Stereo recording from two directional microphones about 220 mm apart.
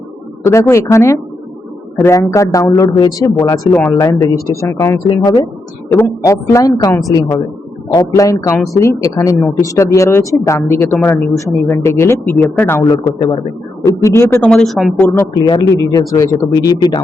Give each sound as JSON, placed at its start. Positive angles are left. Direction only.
{"t": 0.4, "sound": "speech", "side_deg": 10}